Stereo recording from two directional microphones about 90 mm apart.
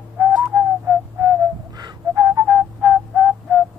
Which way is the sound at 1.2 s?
45° right (ahead or behind).